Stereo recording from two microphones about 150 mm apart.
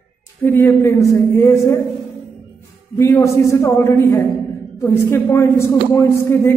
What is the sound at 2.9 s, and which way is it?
A man's voice, 20° left (ahead or behind).